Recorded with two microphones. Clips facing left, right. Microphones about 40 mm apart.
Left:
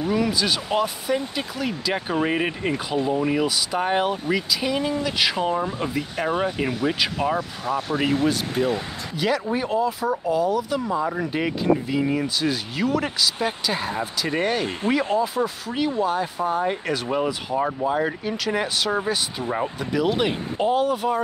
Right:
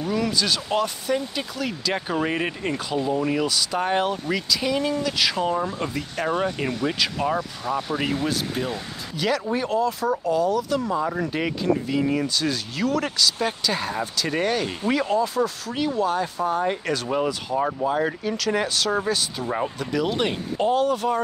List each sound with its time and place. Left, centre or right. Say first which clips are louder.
0.0 s speech: left 2 dB; centre
17.6 s speech: even; centre
18.2 s speech: right 1 dB; centre